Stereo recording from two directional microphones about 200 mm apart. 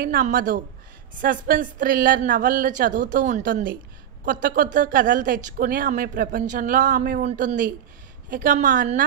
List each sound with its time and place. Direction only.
0.0 s a woman's voice: 50° right (ahead or behind)